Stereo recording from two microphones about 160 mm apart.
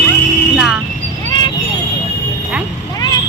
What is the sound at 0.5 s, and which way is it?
Music, 5° right (ahead or behind).